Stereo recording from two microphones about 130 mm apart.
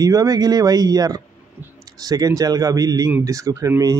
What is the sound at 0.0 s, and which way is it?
Speech, 30° right (ahead or behind).